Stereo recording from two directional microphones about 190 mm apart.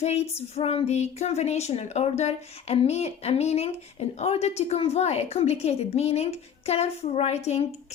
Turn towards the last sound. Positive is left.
turn(degrees=35)  # may be behind; listen again after turning